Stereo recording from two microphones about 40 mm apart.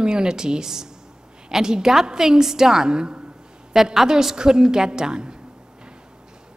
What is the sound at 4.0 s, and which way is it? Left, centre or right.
A woman's voice, centre.